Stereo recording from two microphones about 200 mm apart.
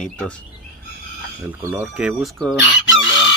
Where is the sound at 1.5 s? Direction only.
10° right (ahead or behind).